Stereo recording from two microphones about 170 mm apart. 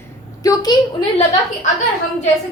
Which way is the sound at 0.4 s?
20° left (ahead or behind).